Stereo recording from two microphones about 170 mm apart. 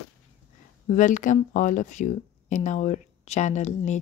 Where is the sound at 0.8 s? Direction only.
45° left (ahead or behind).